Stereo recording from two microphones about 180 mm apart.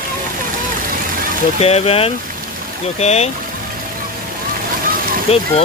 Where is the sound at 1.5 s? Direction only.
35° left (ahead or behind).